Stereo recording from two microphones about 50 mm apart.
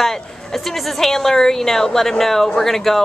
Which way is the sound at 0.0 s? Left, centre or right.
Centre.